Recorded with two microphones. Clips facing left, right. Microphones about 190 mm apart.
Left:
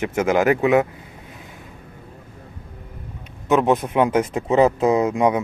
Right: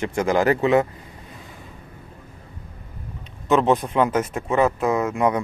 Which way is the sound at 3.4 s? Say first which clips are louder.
Left 1 dB; 15° left (ahead or behind).